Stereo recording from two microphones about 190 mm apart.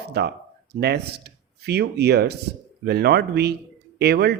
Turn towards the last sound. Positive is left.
turn(degrees=-55)  # may be behind; listen again after turning